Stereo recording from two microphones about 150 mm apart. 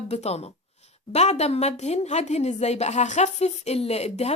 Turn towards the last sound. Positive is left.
turn(degrees=45)  # may be behind; listen again after turning